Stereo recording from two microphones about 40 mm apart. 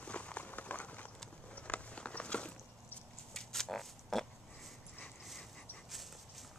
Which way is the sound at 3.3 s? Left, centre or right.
Centre.